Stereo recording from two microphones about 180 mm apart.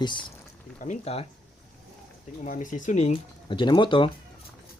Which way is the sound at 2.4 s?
45° left (ahead or behind).